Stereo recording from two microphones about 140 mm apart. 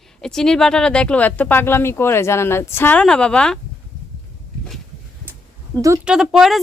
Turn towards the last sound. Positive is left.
turn(degrees=0)  # may be behind; listen again after turning